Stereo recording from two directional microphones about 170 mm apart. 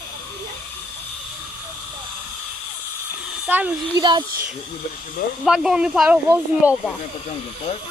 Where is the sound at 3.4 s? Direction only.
10° right (ahead or behind).